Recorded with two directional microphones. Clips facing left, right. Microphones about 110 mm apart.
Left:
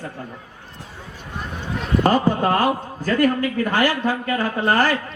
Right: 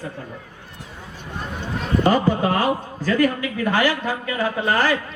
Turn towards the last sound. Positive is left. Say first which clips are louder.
# left 1 dB
turn(degrees=45)  # may be behind; listen again after turning